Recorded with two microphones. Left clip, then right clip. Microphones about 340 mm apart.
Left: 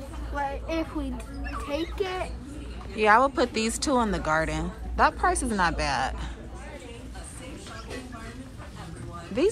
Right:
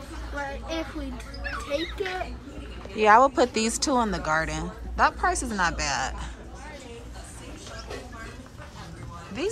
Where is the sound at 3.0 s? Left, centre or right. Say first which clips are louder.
Right 3 dB; centre.